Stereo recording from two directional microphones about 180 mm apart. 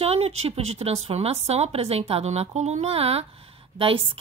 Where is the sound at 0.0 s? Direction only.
35° right (ahead or behind).